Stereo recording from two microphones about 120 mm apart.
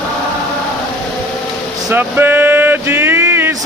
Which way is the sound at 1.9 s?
15° right (ahead or behind).